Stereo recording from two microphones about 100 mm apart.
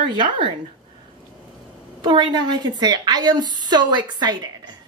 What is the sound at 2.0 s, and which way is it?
A woman's voice, 50° right (ahead or behind).